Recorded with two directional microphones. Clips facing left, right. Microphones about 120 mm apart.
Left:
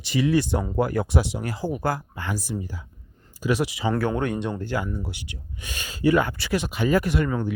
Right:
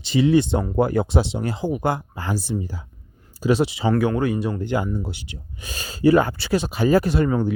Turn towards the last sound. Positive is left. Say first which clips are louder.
# right 4 dB
turn(degrees=-30)  # may be behind; listen again after turning